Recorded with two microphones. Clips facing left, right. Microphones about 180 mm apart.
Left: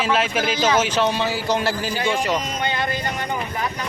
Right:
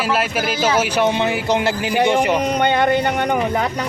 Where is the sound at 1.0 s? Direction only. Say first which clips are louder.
Right 4 dB; 20° right (ahead or behind).